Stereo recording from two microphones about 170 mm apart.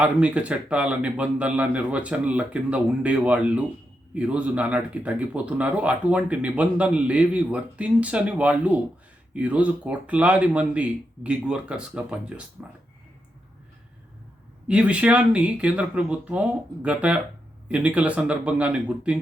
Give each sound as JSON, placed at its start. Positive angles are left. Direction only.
{"t": 0.0, "sound": "speech", "side_deg": -10}
{"t": 14.7, "sound": "speech", "side_deg": -5}